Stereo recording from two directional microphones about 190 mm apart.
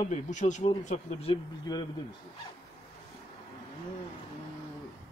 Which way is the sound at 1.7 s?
20° left (ahead or behind).